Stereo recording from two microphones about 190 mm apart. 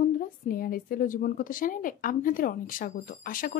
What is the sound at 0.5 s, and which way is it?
A woman's voice, 50° left (ahead or behind).